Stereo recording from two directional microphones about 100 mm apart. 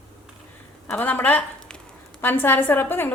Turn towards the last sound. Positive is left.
turn(degrees=20)  # may be behind; listen again after turning